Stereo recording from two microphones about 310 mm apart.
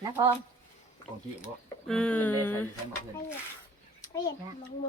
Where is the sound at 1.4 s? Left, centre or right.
Centre.